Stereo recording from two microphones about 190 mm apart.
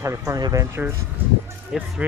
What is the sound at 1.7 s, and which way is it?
Speech, centre (ahead or behind).